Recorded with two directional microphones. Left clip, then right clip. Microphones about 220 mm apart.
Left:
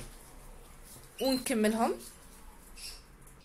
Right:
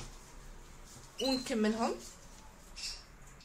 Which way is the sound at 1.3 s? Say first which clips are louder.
Left 4 dB; 30° left (ahead or behind).